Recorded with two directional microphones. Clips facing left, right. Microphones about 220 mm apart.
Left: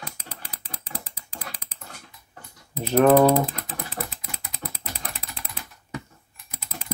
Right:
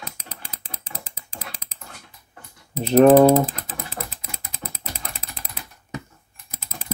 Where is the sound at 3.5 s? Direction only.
35° left (ahead or behind).